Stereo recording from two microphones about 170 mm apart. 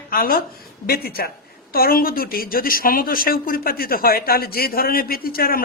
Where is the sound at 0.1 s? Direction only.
60° left (ahead or behind).